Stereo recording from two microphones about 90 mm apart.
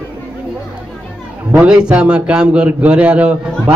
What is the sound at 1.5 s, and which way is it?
A man's voice, 15° right (ahead or behind).